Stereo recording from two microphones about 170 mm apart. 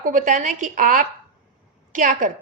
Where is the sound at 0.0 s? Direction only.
50° right (ahead or behind).